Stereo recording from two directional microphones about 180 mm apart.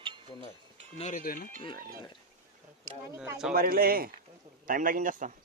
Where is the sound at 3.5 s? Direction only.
55° right (ahead or behind).